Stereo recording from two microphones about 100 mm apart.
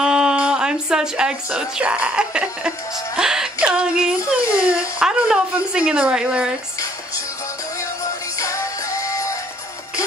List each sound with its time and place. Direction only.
0.0 s a sound: 5° right (ahead or behind)
3.2 s music: 5° right (ahead or behind)
3.6 s speech: 10° right (ahead or behind)
8.0 s music: 35° left (ahead or behind)